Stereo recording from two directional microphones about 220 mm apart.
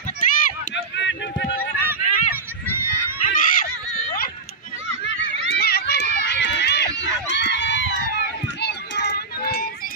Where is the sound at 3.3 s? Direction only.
40° left (ahead or behind).